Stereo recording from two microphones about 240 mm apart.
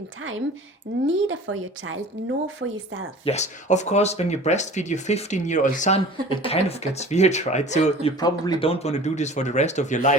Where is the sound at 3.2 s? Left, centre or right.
Left.